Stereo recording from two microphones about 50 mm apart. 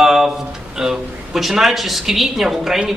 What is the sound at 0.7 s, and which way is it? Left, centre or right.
A woman's voice, centre.